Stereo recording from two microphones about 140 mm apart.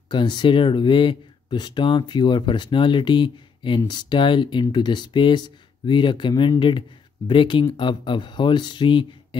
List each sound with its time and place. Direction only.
0.1 s speech: 35° left (ahead or behind)